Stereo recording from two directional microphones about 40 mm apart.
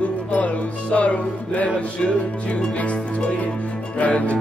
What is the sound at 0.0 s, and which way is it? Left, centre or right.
Music, left.